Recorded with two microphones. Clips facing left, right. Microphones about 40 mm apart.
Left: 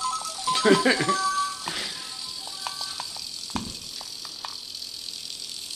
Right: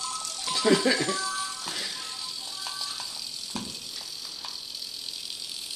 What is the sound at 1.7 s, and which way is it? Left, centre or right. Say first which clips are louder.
Music: left 3 dB; left.